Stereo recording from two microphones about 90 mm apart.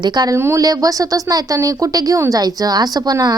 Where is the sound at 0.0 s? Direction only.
45° right (ahead or behind).